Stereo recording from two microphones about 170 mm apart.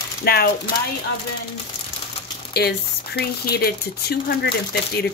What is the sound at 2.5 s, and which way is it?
Speech, 70° left (ahead or behind).